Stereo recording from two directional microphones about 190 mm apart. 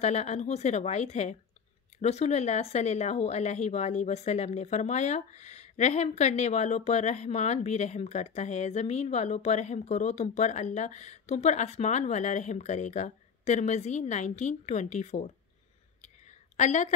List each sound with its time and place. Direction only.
0.0 s speech: 35° left (ahead or behind)
16.5 s a woman's voice: 40° left (ahead or behind)